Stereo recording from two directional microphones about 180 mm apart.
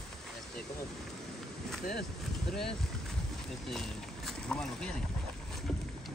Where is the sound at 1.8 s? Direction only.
60° left (ahead or behind).